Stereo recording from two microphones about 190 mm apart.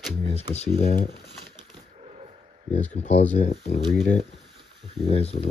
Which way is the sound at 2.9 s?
35° left (ahead or behind).